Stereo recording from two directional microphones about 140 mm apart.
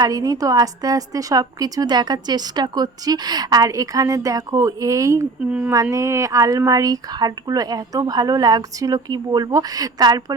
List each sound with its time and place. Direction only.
0.0 s a woman's voice: 25° right (ahead or behind)
5.5 s speech: 10° right (ahead or behind)
5.7 s a woman's voice: 25° right (ahead or behind)